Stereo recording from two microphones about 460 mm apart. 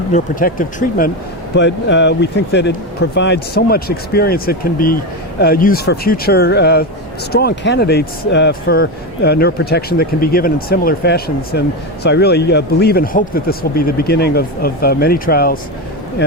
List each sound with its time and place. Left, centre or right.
0.1 s speech: centre